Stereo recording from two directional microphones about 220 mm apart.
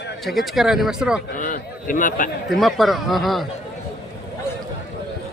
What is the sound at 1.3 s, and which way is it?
Speech, 35° left (ahead or behind).